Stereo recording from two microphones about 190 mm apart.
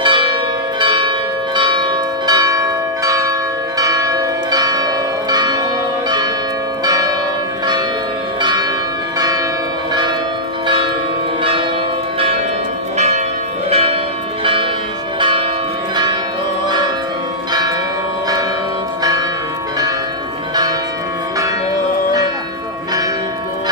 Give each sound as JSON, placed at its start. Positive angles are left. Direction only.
{"t": 0.0, "sound": "change ringing", "side_deg": -25}
{"t": 6.8, "sound": "church bell", "side_deg": -20}
{"t": 8.4, "sound": "church bell", "side_deg": -25}
{"t": 12.9, "sound": "church bell", "side_deg": -35}
{"t": 13.7, "sound": "change ringing", "side_deg": -30}
{"t": 14.4, "sound": "church bell", "side_deg": -25}
{"t": 17.5, "sound": "church bell", "side_deg": -20}